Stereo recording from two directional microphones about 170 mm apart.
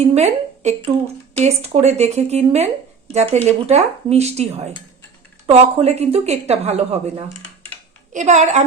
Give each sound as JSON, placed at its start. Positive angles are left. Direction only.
{"t": 0.0, "sound": "a woman's voice", "side_deg": -40}